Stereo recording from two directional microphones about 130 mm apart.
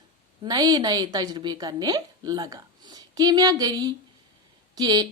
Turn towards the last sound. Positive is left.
turn(degrees=-30)  # may be behind; listen again after turning